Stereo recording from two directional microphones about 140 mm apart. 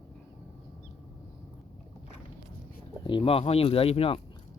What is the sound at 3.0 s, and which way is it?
Speech, 40° left (ahead or behind).